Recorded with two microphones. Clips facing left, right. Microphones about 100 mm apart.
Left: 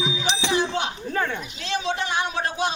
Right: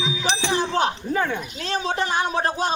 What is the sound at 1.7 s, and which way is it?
Speech, 40° right (ahead or behind).